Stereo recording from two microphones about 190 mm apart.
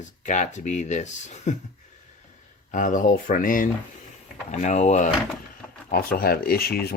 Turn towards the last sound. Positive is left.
turn(degrees=55)  # may be behind; listen again after turning